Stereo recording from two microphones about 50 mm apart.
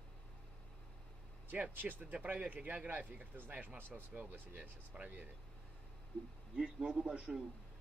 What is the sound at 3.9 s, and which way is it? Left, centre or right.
Speech, centre.